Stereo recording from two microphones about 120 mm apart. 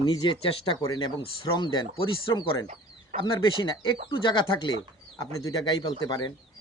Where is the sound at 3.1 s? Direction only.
85° right.